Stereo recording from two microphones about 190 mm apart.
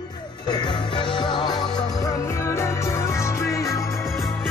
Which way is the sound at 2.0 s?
15° left (ahead or behind).